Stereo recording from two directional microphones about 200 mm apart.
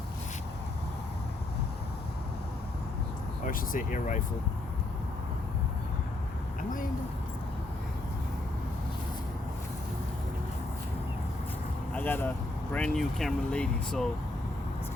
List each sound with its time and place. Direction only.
3.4 s speech: 40° left (ahead or behind)
11.9 s speech: 10° left (ahead or behind)